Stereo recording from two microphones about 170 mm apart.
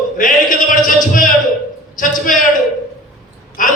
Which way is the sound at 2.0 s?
55° left (ahead or behind).